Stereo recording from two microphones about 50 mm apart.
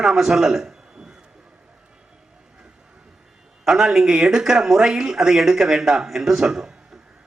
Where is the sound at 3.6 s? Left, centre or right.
Centre.